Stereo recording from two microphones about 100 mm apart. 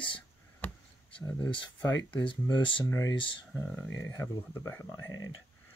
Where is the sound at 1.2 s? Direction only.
25° left (ahead or behind).